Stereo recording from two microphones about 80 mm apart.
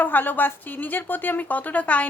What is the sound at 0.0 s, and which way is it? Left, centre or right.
Speech, left.